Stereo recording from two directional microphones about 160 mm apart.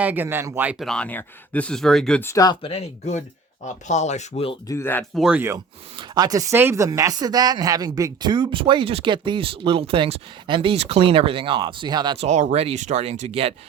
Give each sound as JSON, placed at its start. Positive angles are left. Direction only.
{"t": 0.0, "sound": "speech", "side_deg": -10}
{"t": 0.9, "sound": "speech", "side_deg": 10}
{"t": 2.2, "sound": "speech", "side_deg": 20}
{"t": 4.7, "sound": "speech", "side_deg": 15}
{"t": 5.1, "sound": "speech", "side_deg": -5}
{"t": 6.0, "sound": "speech", "side_deg": -25}
{"t": 12.1, "sound": "speech", "side_deg": -45}